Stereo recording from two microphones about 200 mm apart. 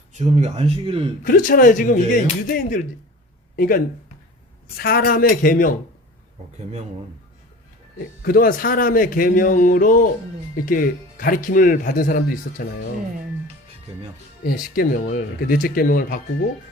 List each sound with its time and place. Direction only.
0.1 s speech: 35° right (ahead or behind)
1.2 s speech: 45° left (ahead or behind)
4.8 s speech: 50° left (ahead or behind)
8.2 s speech: 45° left (ahead or behind)
14.4 s speech: 50° left (ahead or behind)